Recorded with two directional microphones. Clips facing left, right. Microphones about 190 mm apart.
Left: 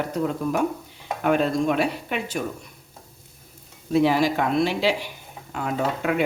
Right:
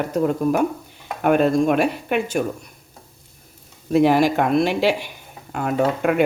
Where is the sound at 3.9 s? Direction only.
50° right (ahead or behind).